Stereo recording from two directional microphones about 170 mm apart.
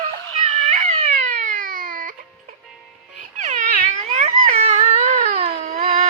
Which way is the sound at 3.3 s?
45° right (ahead or behind).